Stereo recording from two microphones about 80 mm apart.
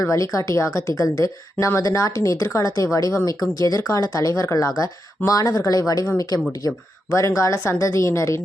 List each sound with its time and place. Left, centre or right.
0.0 s a woman's voice: left